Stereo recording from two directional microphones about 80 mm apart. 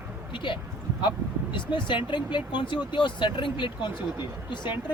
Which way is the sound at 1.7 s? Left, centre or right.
Left.